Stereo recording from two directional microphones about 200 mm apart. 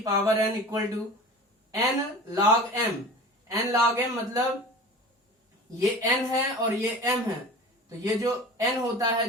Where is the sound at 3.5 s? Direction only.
15° right (ahead or behind).